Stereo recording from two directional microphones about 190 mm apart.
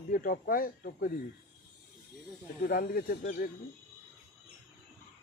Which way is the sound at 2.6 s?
50° left (ahead or behind).